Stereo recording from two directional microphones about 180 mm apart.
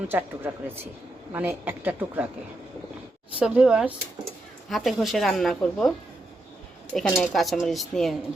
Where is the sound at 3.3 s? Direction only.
5° right (ahead or behind).